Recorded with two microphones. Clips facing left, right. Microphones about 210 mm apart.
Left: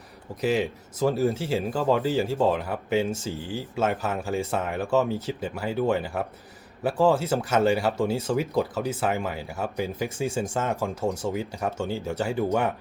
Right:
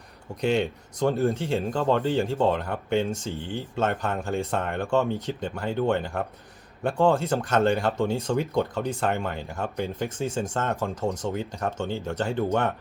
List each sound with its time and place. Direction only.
0.4 s speech: 5° left (ahead or behind)